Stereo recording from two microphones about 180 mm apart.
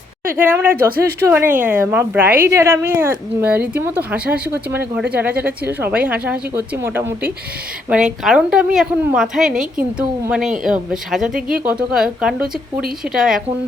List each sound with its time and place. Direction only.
0.4 s speech: 10° right (ahead or behind)
0.8 s a woman's voice: 55° right (ahead or behind)
1.3 s a woman's voice: 10° right (ahead or behind)